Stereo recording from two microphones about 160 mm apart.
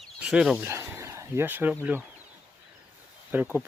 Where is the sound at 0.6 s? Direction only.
15° right (ahead or behind).